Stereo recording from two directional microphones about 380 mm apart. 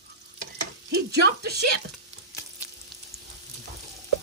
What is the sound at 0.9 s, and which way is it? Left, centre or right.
Speech, right.